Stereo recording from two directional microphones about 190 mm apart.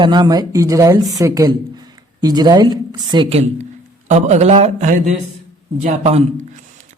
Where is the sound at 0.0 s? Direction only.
20° right (ahead or behind).